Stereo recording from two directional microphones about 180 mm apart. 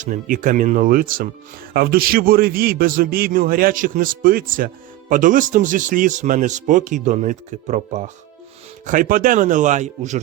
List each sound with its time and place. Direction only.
0.0 s a man's voice: 45° right (ahead or behind)